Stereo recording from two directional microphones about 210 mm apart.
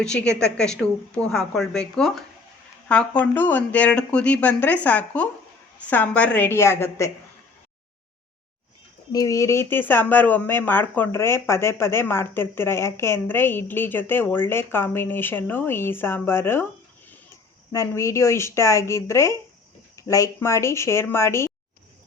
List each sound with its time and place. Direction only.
0.0 s a woman's voice: 5° left (ahead or behind)
9.1 s speech: 15° left (ahead or behind)
17.7 s speech: 15° left (ahead or behind)